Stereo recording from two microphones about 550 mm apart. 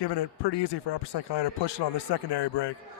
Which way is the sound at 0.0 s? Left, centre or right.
Left.